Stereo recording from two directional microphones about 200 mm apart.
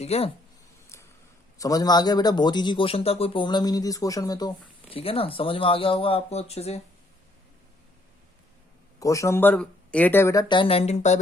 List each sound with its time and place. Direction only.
0.0 s speech: 30° left (ahead or behind)
1.5 s a man's voice: 15° left (ahead or behind)
9.0 s speech: 15° left (ahead or behind); by 11.2 s 35° left (ahead or behind)